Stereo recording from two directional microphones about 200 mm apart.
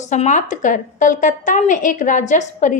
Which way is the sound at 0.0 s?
35° left (ahead or behind).